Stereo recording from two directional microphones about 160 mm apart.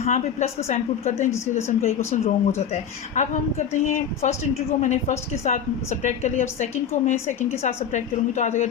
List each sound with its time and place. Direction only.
0.0 s a woman's voice: 45° left (ahead or behind)